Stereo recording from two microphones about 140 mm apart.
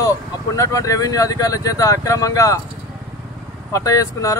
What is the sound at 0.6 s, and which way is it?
Speech, 25° left (ahead or behind).